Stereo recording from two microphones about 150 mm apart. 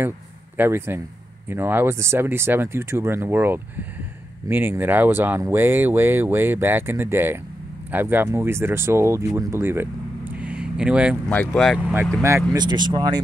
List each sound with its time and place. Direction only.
0.6 s speech: 15° right (ahead or behind)
11.2 s speech: 5° left (ahead or behind)
12.2 s speech: 20° right (ahead or behind)